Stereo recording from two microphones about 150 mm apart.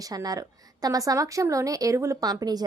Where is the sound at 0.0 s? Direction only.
25° right (ahead or behind).